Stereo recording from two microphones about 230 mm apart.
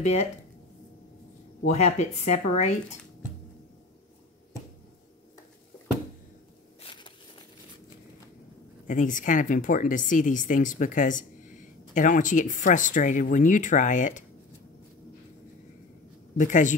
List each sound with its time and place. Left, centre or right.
0.0 s speech: left
1.7 s speech: left
6.8 s a sound: left
8.8 s speech: left
16.3 s speech: left